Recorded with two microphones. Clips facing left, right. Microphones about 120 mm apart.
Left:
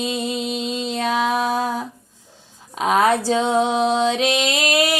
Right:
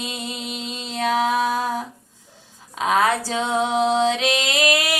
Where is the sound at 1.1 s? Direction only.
20° left (ahead or behind).